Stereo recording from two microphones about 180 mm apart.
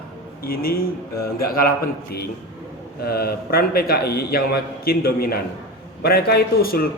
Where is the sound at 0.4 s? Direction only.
55° left (ahead or behind).